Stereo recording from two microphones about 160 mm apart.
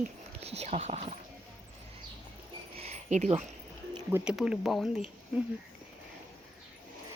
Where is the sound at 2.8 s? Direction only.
45° right (ahead or behind).